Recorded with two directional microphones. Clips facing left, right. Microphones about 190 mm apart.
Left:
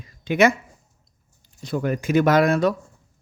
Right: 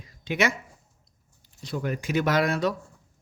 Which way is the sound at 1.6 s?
50° left (ahead or behind).